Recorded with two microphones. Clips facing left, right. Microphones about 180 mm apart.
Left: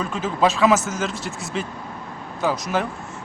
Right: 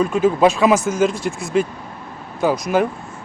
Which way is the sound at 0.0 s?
10° right (ahead or behind).